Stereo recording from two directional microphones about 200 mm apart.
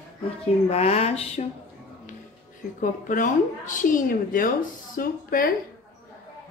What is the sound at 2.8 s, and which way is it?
A woman's voice, 40° left (ahead or behind).